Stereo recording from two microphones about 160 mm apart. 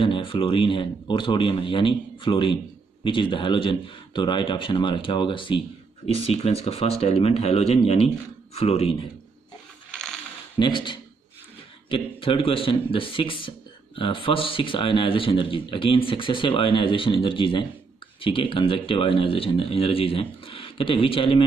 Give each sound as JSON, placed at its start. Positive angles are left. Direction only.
{"t": 0.0, "sound": "a man's voice", "side_deg": 35}
{"t": 9.8, "sound": "a sound", "side_deg": 5}
{"t": 10.6, "sound": "a man's voice", "side_deg": 30}